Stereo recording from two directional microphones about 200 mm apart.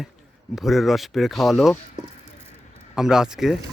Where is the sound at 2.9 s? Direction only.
5° right (ahead or behind).